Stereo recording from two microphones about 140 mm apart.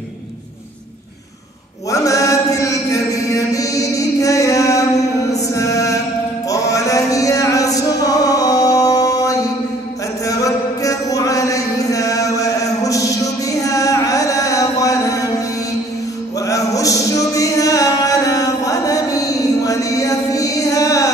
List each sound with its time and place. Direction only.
1.9 s chant: 25° left (ahead or behind)
5.3 s mantra: 25° left (ahead or behind)
6.5 s chant: 25° left (ahead or behind)
10.2 s music: 25° left (ahead or behind)
16.3 s music: 25° left (ahead or behind)